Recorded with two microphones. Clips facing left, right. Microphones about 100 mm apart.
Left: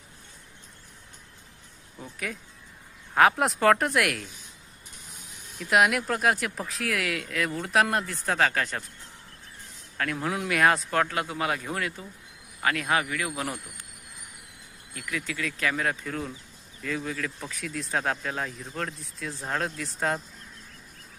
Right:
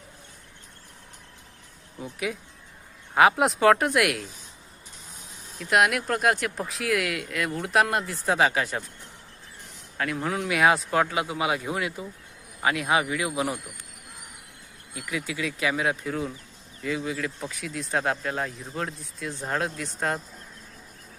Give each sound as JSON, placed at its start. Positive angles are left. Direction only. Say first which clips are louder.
{"t": 2.0, "sound": "speech", "louder": "right 5 dB", "side_deg": -10}
{"t": 5.5, "sound": "speech", "louder": "even", "side_deg": 0}
{"t": 10.0, "sound": "speech", "louder": "right 1 dB", "side_deg": -5}
{"t": 14.9, "sound": "speech", "louder": "right 2 dB", "side_deg": -10}